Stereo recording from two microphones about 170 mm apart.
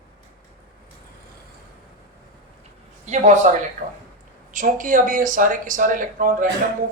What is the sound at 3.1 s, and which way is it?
Speech, 45° right (ahead or behind).